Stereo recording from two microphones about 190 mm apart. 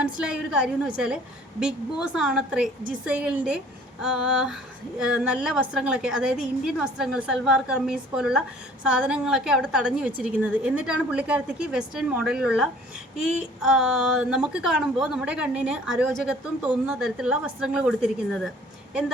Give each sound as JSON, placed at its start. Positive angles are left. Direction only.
{"t": 0.0, "sound": "a woman's voice", "side_deg": -5}